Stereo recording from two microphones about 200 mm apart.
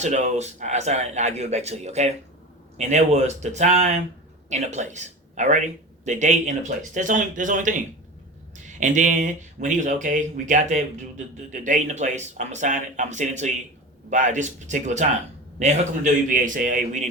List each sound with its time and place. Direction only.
0.0 s speech: 35° right (ahead or behind)